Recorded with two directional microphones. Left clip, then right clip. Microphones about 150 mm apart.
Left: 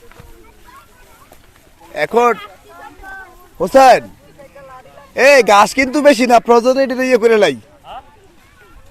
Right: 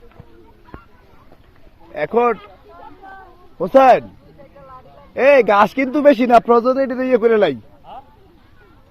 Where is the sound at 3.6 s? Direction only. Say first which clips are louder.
Left 3 dB; 30° left (ahead or behind).